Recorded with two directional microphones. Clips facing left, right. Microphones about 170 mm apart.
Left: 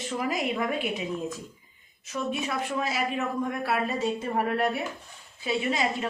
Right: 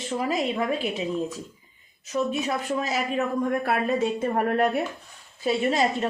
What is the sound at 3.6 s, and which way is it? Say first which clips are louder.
A woman's voice: right 3 dB; 50° right (ahead or behind).